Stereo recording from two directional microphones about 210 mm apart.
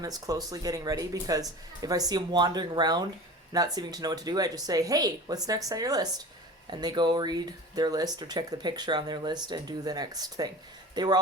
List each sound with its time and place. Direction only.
0.0 s speech: 15° right (ahead or behind)